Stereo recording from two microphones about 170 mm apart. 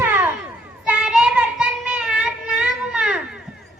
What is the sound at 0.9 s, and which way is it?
Child singing, 5° right (ahead or behind).